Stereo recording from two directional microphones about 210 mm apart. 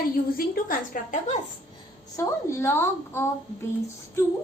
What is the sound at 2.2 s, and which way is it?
A woman's voice, 10° left (ahead or behind).